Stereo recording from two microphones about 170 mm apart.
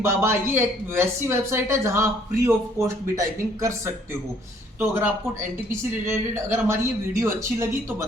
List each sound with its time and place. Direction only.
0.0 s speech: 15° right (ahead or behind)
6.1 s speech: 15° right (ahead or behind)